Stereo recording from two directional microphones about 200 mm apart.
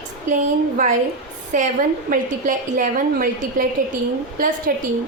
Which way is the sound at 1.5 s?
40° right (ahead or behind).